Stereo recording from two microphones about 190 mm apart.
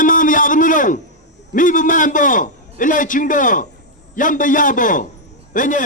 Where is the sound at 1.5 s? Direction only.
45° left (ahead or behind).